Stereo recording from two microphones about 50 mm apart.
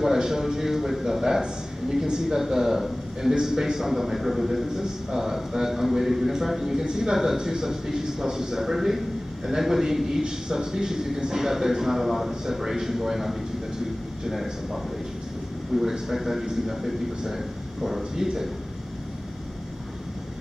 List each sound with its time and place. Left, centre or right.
0.0 s a man's voice: centre